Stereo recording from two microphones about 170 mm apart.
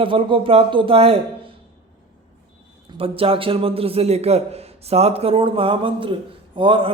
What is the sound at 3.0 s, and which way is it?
Mantra, 35° right (ahead or behind).